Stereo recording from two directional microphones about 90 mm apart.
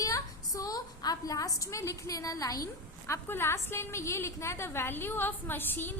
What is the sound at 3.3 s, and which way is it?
A woman's voice, 25° left (ahead or behind).